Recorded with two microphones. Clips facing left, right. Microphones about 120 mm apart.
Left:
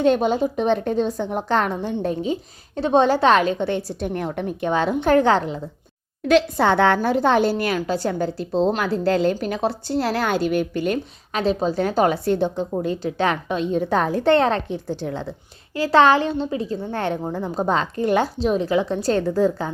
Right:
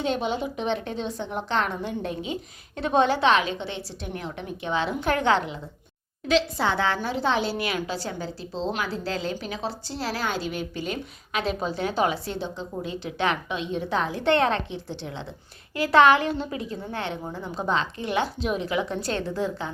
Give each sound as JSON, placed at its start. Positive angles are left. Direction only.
{"t": 0.0, "sound": "a woman's voice", "side_deg": 45}
{"t": 5.0, "sound": "a woman's voice", "side_deg": 35}
{"t": 6.2, "sound": "a woman's voice", "side_deg": 55}
{"t": 11.3, "sound": "a woman's voice", "side_deg": 35}
{"t": 12.8, "sound": "a woman's voice", "side_deg": 45}
{"t": 15.7, "sound": "a woman's voice", "side_deg": 30}
{"t": 17.3, "sound": "a woman's voice", "side_deg": 40}